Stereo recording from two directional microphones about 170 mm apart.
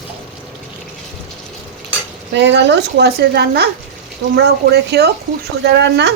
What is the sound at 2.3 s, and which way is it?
A woman's voice, 90° right.